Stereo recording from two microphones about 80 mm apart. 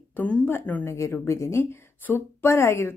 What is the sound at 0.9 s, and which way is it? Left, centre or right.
A woman's voice, left.